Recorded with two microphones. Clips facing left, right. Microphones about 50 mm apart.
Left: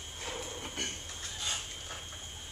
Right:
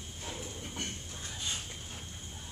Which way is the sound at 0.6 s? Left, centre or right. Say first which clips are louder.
Even; left.